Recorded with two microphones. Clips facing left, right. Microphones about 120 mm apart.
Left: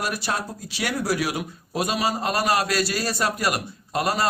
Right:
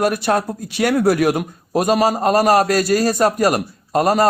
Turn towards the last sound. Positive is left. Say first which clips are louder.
# right 9 dB
turn(degrees=-45)  # may be behind; listen again after turning